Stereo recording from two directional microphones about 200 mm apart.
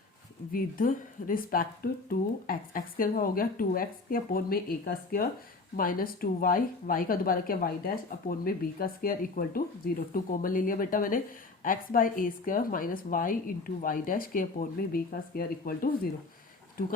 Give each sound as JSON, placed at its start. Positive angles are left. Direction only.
{"t": 0.5, "sound": "speech", "side_deg": 45}